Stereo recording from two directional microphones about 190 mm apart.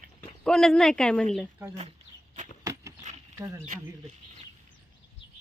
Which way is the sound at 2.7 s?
20° right (ahead or behind).